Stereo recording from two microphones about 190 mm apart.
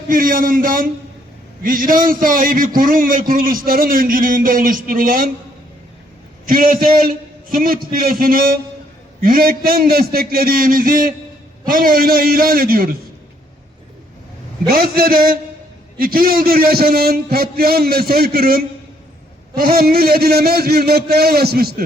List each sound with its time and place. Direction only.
0.1 s a man's voice: 45° right (ahead or behind)
6.5 s a man's voice: 50° right (ahead or behind)
14.7 s a man's voice: 50° right (ahead or behind)